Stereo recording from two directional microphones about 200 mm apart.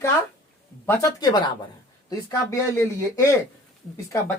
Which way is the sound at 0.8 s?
10° left (ahead or behind).